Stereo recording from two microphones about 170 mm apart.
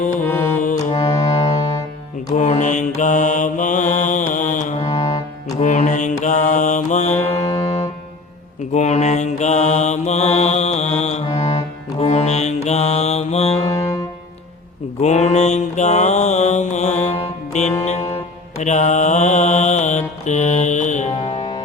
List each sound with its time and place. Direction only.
0.2 s music: 15° left (ahead or behind)
2.3 s mantra: 45° left (ahead or behind)
4.9 s music: 25° left (ahead or behind)
5.5 s mantra: 45° left (ahead or behind)
7.3 s music: 35° left (ahead or behind)
8.7 s mantra: 45° left (ahead or behind)
15.0 s mantra: 40° left (ahead or behind)
17.8 s music: 40° left (ahead or behind)
18.6 s mantra: 45° left (ahead or behind)
21.2 s music: 40° left (ahead or behind)